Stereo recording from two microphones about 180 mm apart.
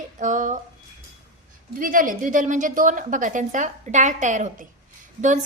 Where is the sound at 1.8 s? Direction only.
50° right (ahead or behind).